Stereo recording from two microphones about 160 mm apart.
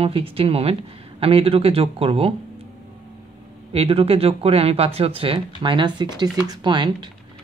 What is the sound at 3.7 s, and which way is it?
Speech, 40° right (ahead or behind).